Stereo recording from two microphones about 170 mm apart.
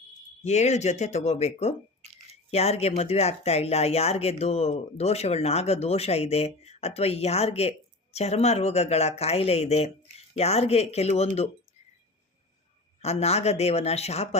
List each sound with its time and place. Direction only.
0.4 s speech: 40° left (ahead or behind)
13.0 s speech: 40° left (ahead or behind)